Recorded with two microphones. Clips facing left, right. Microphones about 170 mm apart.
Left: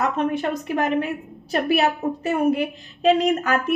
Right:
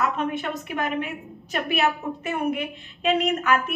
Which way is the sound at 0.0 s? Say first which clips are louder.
Left 3 dB; 40° left (ahead or behind).